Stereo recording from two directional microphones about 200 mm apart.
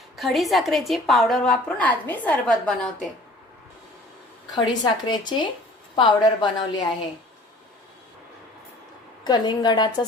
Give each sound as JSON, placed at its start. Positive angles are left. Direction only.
{"t": 0.2, "sound": "a woman's voice", "side_deg": 0}
{"t": 4.5, "sound": "a woman's voice", "side_deg": 20}
{"t": 9.2, "sound": "a woman's voice", "side_deg": 20}